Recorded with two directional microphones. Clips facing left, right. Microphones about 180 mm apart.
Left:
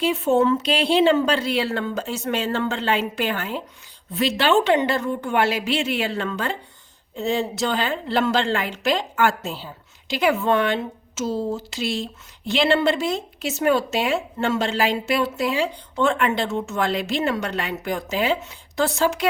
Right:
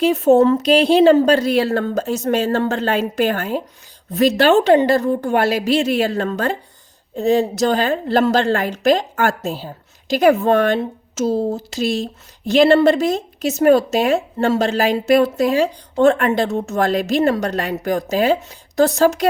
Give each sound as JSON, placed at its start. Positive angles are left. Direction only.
{"t": 0.0, "sound": "a woman's voice", "side_deg": -40}